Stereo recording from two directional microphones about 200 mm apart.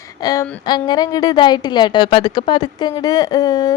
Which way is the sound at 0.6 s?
20° left (ahead or behind).